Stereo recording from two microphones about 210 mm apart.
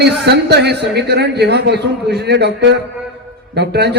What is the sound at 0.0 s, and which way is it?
A man's voice, 50° right (ahead or behind).